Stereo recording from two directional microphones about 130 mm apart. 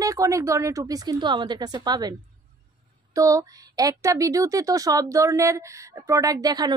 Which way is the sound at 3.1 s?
25° right (ahead or behind).